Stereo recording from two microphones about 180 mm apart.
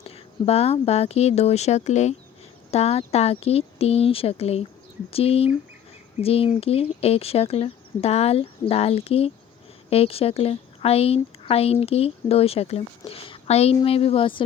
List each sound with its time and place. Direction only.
0.0 s speech: 35° left (ahead or behind)